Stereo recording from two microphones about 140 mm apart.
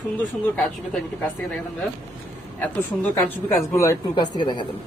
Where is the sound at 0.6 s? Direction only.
5° left (ahead or behind).